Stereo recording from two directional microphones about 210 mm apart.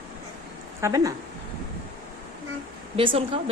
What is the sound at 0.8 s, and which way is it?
Speech, 15° right (ahead or behind).